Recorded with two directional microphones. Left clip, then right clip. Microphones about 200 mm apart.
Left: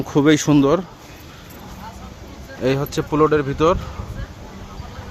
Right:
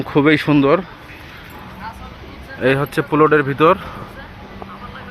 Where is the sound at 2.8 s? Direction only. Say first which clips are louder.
Right 1 dB; centre (ahead or behind).